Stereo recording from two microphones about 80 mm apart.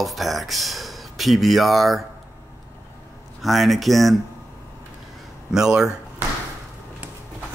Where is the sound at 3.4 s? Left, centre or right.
Centre.